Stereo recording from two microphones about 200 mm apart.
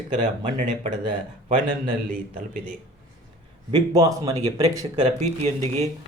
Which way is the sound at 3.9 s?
15° right (ahead or behind).